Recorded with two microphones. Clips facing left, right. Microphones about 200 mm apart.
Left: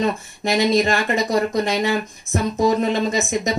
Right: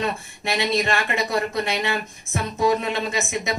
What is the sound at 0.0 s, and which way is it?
Speech, 40° left (ahead or behind).